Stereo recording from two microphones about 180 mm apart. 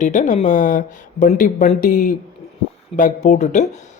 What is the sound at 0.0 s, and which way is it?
Speech, 45° left (ahead or behind).